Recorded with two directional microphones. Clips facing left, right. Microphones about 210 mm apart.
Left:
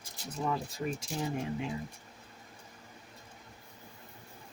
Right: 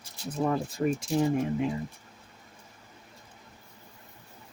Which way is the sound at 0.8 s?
65° right (ahead or behind).